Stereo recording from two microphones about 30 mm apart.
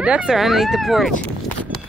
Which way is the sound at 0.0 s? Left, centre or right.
Right.